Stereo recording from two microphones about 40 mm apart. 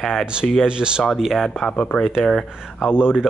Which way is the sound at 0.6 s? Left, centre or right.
Right.